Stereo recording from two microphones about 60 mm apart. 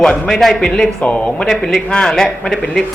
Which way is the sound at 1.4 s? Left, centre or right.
Centre.